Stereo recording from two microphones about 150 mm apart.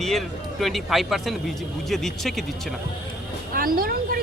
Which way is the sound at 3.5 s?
75° right (ahead or behind).